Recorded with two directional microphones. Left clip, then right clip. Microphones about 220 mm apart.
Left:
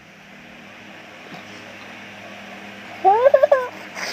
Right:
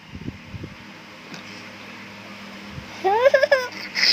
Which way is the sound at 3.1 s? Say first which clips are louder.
Left 3 dB; 25° right (ahead or behind).